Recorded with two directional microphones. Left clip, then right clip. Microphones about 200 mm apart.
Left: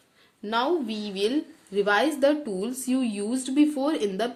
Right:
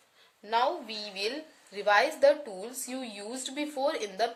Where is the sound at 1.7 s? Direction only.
30° left (ahead or behind).